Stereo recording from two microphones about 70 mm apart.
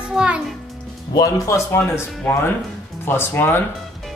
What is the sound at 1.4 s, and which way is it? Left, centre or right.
Speech, left.